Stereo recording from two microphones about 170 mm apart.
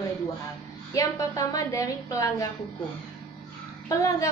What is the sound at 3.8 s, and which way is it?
Speech, 20° left (ahead or behind).